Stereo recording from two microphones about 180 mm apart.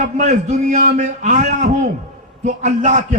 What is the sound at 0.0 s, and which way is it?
A man's voice, 40° right (ahead or behind).